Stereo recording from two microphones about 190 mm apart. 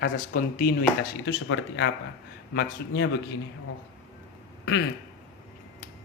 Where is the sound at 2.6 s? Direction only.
65° left (ahead or behind).